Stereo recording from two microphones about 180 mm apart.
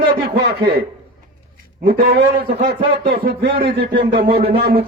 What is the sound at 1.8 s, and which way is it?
A man's voice, 60° right (ahead or behind).